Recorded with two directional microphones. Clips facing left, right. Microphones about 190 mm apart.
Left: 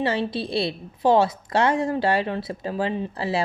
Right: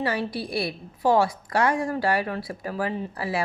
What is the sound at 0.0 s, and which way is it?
A woman's voice, 25° left (ahead or behind).